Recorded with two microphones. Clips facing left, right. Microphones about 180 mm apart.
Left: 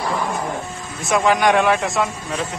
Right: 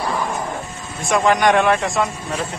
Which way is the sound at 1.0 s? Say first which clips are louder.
Right 1 dB; centre (ahead or behind).